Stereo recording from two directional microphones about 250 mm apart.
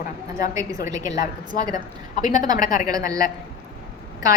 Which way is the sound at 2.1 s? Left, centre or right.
Left.